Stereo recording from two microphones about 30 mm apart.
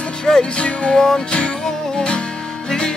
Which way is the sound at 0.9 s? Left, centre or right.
Centre.